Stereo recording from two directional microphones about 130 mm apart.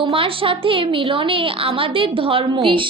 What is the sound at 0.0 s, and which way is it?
A woman's voice, 45° right (ahead or behind).